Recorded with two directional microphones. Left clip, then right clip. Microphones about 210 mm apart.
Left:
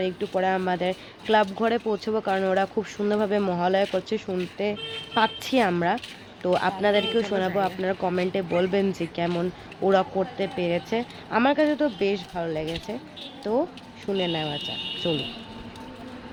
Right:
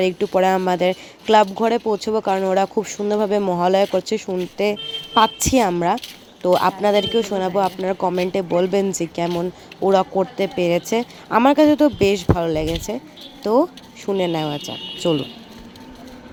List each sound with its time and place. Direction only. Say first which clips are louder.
0.0 s speech: right 8 dB; 40° right (ahead or behind)